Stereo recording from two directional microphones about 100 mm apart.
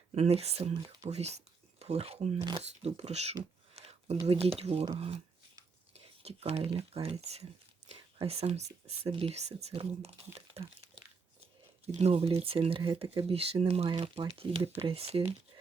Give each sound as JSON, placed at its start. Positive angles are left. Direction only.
{"t": 0.1, "sound": "speech", "side_deg": -90}
{"t": 3.8, "sound": "a sound", "side_deg": -90}
{"t": 4.3, "sound": "speech", "side_deg": -75}
{"t": 6.2, "sound": "speech", "side_deg": -80}
{"t": 10.3, "sound": "a sound", "side_deg": -90}
{"t": 11.9, "sound": "speech", "side_deg": -80}
{"t": 12.4, "sound": "speech", "side_deg": -70}